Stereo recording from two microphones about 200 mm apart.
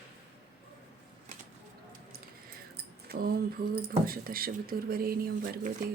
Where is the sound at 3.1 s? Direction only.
50° right (ahead or behind).